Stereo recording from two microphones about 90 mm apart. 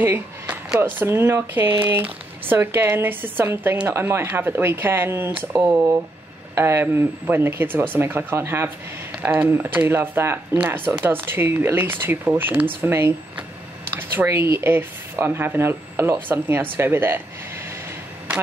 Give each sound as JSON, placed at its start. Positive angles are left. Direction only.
{"t": 0.7, "sound": "speech", "side_deg": -25}